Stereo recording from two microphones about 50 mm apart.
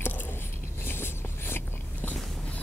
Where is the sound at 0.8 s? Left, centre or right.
Left.